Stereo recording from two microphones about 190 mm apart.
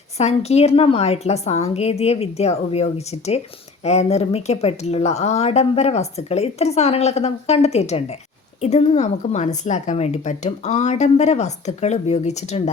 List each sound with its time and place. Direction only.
0.2 s speech: 35° left (ahead or behind)